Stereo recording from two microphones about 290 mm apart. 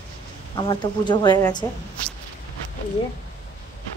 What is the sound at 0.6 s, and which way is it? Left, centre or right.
A woman's voice, centre.